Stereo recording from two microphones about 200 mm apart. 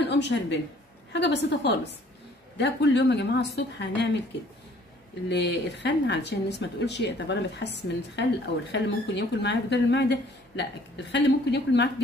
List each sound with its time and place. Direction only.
0.0 s a woman's voice: 60° left (ahead or behind)
5.3 s a woman's voice: 60° left (ahead or behind)